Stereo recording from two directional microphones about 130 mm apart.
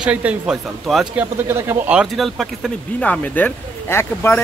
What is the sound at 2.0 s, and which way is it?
Speech, centre (ahead or behind).